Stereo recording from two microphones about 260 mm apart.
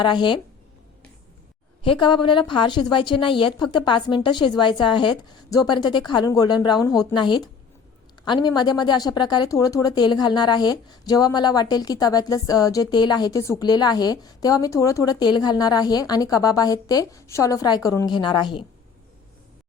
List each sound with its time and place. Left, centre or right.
0.0 s speech: centre
1.8 s speech: centre